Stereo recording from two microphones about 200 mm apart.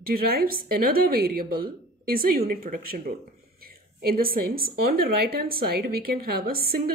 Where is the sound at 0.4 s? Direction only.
50° right (ahead or behind).